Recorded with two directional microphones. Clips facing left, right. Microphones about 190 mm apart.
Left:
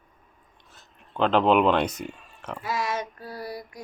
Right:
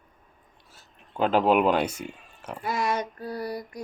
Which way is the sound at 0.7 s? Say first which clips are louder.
Left 2 dB; 10° right (ahead or behind).